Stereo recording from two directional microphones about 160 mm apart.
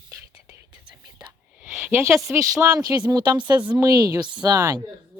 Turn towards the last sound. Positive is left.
turn(degrees=-20)  # may be behind; listen again after turning